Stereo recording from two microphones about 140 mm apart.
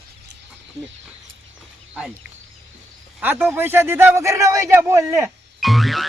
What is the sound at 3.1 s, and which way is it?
A man's voice, 10° right (ahead or behind).